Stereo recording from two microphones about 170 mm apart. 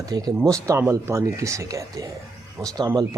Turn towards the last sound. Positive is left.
turn(degrees=-20)  # may be behind; listen again after turning